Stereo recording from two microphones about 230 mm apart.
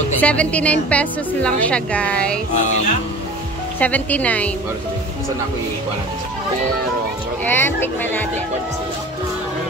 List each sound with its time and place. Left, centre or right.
0.2 s a woman's voice: centre
2.5 s music: left
3.8 s speech: centre
7.4 s speech: centre